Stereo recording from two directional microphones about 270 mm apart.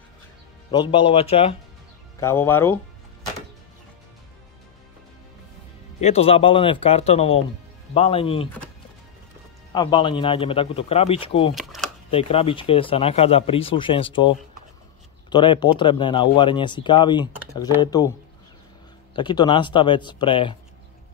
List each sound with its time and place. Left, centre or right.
0.7 s speech: centre
2.1 s speech: centre
5.9 s speech: left
9.7 s speech: centre
11.5 s camera: centre
12.1 s speech: left
19.1 s speech: centre